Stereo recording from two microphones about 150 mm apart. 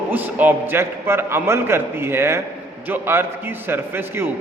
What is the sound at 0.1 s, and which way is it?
A man's voice, 10° right (ahead or behind).